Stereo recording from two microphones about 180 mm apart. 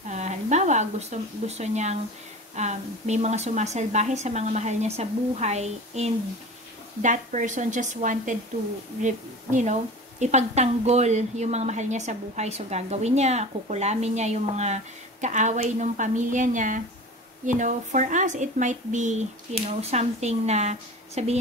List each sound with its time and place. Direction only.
0.1 s a woman's voice: 40° right (ahead or behind)